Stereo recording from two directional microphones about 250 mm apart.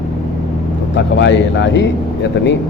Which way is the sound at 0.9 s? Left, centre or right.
Left.